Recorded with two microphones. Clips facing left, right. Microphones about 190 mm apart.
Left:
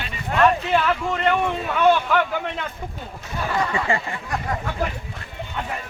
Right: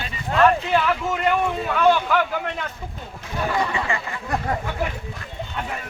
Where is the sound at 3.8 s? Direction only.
30° left (ahead or behind).